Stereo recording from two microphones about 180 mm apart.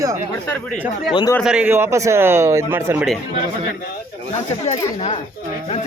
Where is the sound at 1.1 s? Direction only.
25° left (ahead or behind).